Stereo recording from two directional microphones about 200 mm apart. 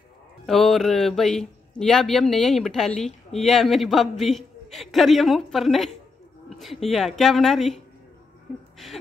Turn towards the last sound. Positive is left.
turn(degrees=0)  # may be behind; listen again after turning